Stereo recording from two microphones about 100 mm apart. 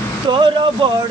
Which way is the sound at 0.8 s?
55° right (ahead or behind).